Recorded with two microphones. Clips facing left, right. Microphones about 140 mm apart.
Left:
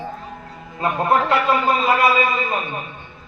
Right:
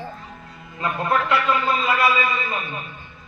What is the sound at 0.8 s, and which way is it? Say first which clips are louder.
A man's voice: left 4 dB; 30° left (ahead or behind).